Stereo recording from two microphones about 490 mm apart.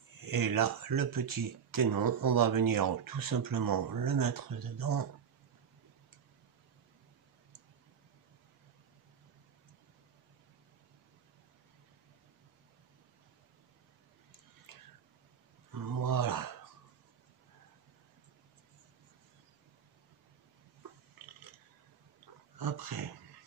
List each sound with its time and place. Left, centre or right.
0.2 s speech: right
15.7 s a sound: right
22.6 s speech: right